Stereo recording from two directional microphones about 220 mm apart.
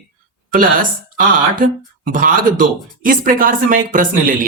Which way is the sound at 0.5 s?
40° right (ahead or behind).